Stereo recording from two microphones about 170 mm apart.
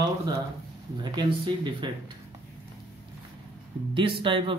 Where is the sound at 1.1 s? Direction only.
25° right (ahead or behind).